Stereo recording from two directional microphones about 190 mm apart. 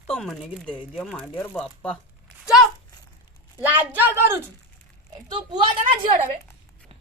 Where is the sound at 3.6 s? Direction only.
10° right (ahead or behind).